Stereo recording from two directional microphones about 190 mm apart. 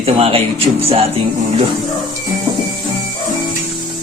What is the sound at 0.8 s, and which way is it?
Music, 30° right (ahead or behind).